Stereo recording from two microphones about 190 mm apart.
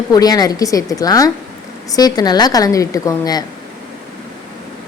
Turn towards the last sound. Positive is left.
turn(degrees=20)  # may be behind; listen again after turning